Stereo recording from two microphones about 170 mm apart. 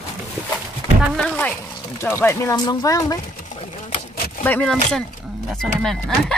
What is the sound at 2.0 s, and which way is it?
Speech, 15° left (ahead or behind).